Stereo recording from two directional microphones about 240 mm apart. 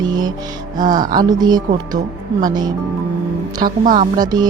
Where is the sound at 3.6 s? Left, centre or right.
Right.